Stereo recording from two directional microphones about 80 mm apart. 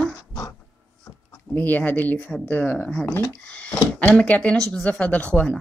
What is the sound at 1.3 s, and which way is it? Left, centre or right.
Speech, left.